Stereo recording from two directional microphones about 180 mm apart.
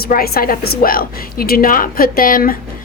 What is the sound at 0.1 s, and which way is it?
A woman's voice, 55° left (ahead or behind).